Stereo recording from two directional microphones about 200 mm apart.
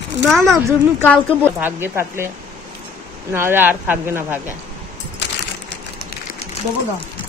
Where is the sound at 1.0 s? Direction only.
5° left (ahead or behind).